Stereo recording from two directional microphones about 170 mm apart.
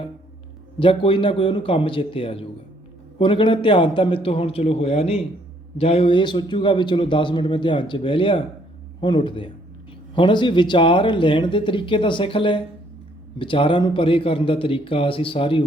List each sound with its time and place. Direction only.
0.8 s a man's voice: 30° left (ahead or behind)